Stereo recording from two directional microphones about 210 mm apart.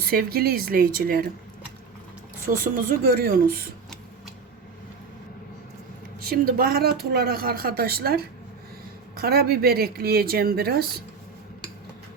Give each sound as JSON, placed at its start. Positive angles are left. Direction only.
{"t": 0.0, "sound": "speech", "side_deg": -45}
{"t": 2.5, "sound": "speech", "side_deg": -40}
{"t": 6.2, "sound": "speech", "side_deg": -45}